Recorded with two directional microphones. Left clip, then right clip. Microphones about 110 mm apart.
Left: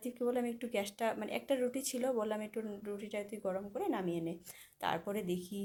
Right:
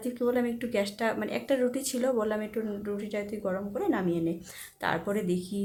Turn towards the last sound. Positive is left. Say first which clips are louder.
# right 8 dB
turn(degrees=15)  # may be behind; listen again after turning